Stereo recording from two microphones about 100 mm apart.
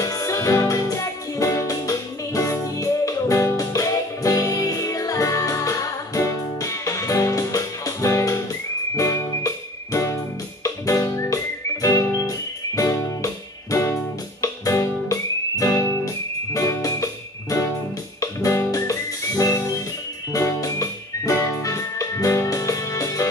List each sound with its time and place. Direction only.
0.0 s music: 35° left (ahead or behind)
10.6 s music: 30° left (ahead or behind)